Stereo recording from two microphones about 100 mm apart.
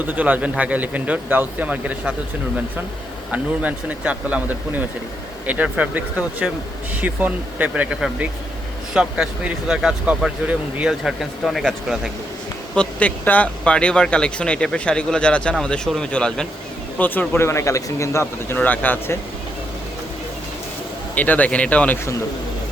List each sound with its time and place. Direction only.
0.0 s speech: 15° right (ahead or behind)
3.3 s speech: 15° right (ahead or behind)
8.9 s speech: 10° right (ahead or behind)
12.7 s speech: 10° left (ahead or behind)
17.0 s speech: 20° left (ahead or behind)
21.2 s speech: 15° left (ahead or behind)